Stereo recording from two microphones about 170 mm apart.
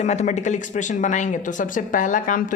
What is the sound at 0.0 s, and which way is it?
Speech, 40° left (ahead or behind).